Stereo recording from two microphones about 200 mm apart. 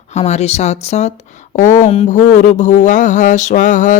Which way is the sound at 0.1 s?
35° left (ahead or behind).